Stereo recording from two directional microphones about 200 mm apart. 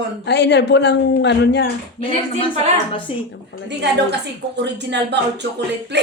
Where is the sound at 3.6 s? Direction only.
60° right (ahead or behind).